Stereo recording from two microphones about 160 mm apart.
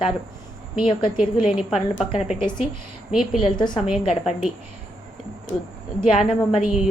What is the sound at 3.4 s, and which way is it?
Speech, 30° left (ahead or behind).